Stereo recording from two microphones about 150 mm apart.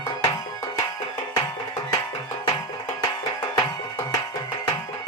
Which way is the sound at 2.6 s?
25° left (ahead or behind).